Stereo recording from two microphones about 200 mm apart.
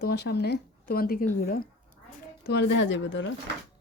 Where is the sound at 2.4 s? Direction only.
60° left (ahead or behind).